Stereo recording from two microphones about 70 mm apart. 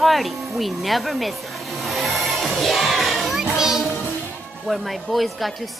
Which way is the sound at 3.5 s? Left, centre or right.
Centre.